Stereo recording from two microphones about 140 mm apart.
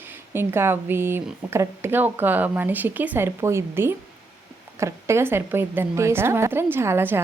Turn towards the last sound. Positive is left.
turn(degrees=-15)  # may be behind; listen again after turning